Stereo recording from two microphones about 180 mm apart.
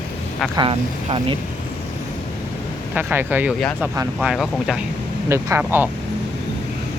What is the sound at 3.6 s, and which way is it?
Speech, 5° left (ahead or behind).